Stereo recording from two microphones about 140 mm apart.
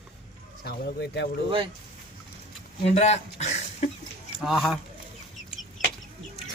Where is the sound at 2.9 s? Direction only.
55° left (ahead or behind).